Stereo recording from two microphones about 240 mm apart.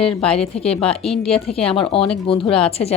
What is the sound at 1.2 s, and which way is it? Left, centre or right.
Speech, left.